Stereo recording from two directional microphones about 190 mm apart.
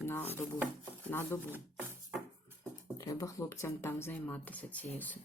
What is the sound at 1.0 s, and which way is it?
Speech, 10° left (ahead or behind).